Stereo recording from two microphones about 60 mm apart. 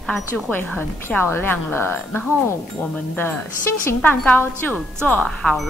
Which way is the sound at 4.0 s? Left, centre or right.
Left.